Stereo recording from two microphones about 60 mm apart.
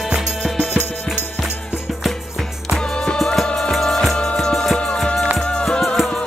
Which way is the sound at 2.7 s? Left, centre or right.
Centre.